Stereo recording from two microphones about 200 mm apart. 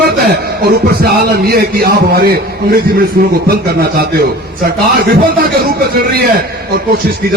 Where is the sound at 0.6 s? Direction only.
50° right (ahead or behind).